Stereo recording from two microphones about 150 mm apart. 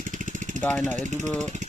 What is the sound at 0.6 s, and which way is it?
Speech, 10° left (ahead or behind).